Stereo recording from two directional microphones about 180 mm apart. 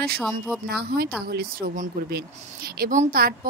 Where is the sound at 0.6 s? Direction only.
60° right (ahead or behind).